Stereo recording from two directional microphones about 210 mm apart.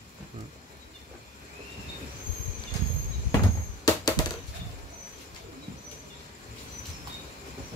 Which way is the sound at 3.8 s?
20° left (ahead or behind).